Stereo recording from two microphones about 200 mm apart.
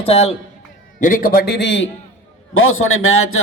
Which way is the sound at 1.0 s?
45° left (ahead or behind).